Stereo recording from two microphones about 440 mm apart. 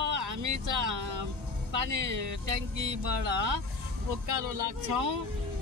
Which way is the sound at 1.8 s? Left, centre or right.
Right.